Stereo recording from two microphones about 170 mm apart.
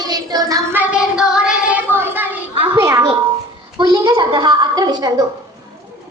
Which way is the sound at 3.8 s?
25° right (ahead or behind).